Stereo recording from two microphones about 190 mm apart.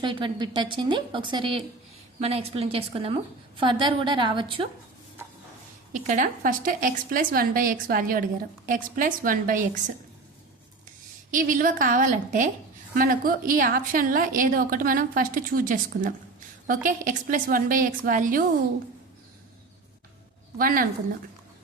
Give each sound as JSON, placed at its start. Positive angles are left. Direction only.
{"t": 0.0, "sound": "a woman's voice", "side_deg": -25}
{"t": 5.9, "sound": "a woman's voice", "side_deg": -40}
{"t": 11.3, "sound": "a woman's voice", "side_deg": -45}
{"t": 20.6, "sound": "a woman's voice", "side_deg": -50}